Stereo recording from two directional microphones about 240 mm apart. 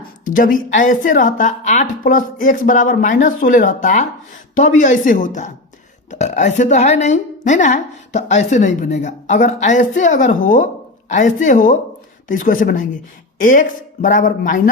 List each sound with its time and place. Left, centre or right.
0.0 s a woman's voice: left